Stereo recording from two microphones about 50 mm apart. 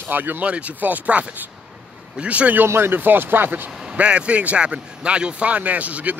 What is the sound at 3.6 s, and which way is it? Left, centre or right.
Vehicle, centre.